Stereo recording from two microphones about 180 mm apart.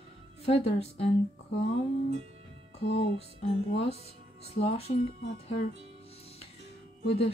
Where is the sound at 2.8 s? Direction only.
70° left (ahead or behind).